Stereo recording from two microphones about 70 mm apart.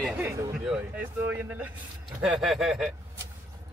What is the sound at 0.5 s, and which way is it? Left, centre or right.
Speech, centre.